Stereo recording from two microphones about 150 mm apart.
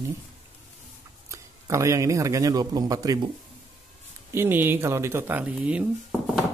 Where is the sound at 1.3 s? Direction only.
20° right (ahead or behind).